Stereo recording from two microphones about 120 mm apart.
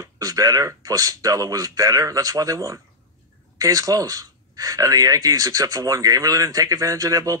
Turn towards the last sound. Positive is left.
turn(degrees=-30)  # may be behind; listen again after turning